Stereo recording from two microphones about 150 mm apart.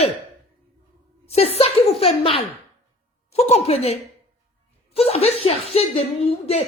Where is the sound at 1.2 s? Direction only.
45° left (ahead or behind).